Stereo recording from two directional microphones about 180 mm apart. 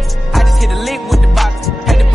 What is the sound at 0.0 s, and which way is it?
Music, centre (ahead or behind).